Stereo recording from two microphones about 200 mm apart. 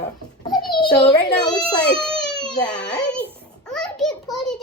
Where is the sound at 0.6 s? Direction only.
25° left (ahead or behind).